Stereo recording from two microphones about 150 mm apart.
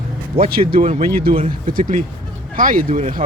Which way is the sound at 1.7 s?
65° right (ahead or behind).